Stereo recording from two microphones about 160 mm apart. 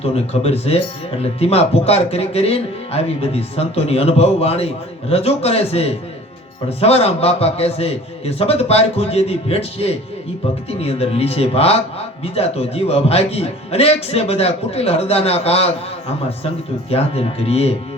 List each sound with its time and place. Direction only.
0.0 s speech: 40° left (ahead or behind)
16.9 s speech: 40° left (ahead or behind)